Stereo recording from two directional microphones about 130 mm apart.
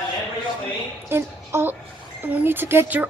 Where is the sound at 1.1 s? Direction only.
20° right (ahead or behind).